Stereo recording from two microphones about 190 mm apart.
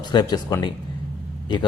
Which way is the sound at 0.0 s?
20° left (ahead or behind).